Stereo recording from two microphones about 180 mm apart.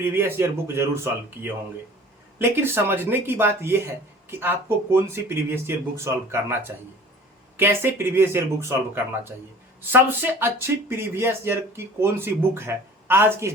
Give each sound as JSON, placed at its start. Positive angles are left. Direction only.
{"t": 0.0, "sound": "speech", "side_deg": -10}
{"t": 9.9, "sound": "speech", "side_deg": -10}